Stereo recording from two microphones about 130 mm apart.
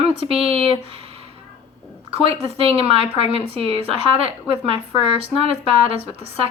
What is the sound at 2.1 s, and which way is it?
Speech, 50° right (ahead or behind).